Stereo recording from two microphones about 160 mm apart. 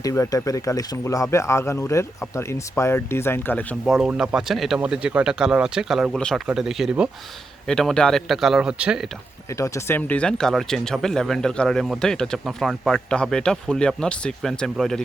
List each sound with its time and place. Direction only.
0.0 s speech: 20° left (ahead or behind)
3.8 s speech: centre (ahead or behind)
9.5 s speech: 20° left (ahead or behind)